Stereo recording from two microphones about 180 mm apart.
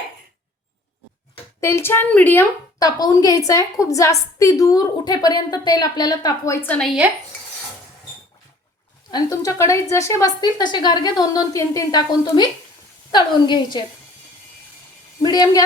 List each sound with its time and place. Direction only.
1.6 s a woman's voice: 15° left (ahead or behind)
9.0 s a woman's voice: 20° left (ahead or behind)
15.2 s a woman's voice: 20° left (ahead or behind)